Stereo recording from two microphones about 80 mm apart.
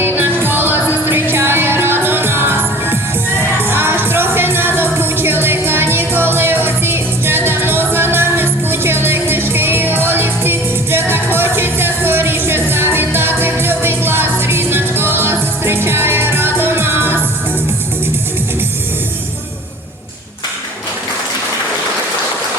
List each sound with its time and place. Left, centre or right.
0.0 s music: right